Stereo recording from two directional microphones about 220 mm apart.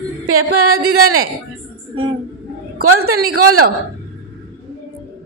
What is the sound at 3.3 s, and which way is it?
Speech, 80° right.